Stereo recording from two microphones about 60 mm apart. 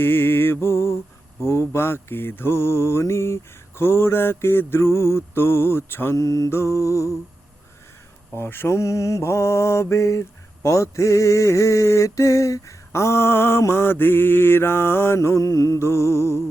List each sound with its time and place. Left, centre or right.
0.0 s mantra: left
6.1 s mantra: left
6.5 s mantra: left
8.4 s mantra: left
8.7 s mantra: left
15.8 s mantra: left